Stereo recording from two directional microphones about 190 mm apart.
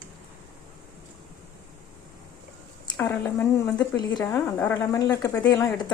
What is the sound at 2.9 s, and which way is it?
A woman's voice, 10° left (ahead or behind).